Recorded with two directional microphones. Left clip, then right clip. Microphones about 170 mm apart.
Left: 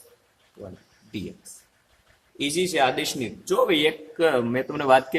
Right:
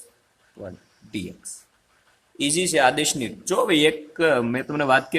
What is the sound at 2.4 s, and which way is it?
A man's voice, 55° right (ahead or behind).